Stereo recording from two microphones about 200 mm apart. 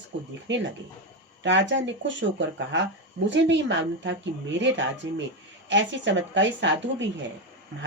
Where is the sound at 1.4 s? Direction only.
65° right (ahead or behind).